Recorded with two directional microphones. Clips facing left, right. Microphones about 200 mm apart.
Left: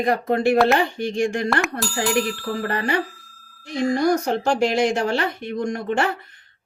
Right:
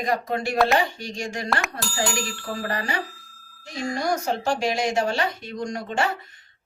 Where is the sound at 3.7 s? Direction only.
60° left (ahead or behind).